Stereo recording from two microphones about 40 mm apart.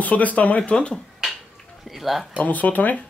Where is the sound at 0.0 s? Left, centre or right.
Left.